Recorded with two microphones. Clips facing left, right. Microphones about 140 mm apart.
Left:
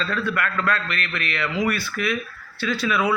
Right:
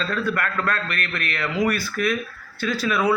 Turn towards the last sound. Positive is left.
turn(degrees=-40)  # may be behind; listen again after turning